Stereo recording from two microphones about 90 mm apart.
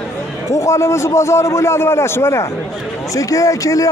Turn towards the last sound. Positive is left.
turn(degrees=40)  # may be behind; listen again after turning